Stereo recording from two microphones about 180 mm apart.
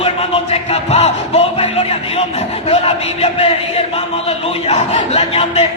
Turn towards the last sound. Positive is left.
turn(degrees=35)  # may be behind; listen again after turning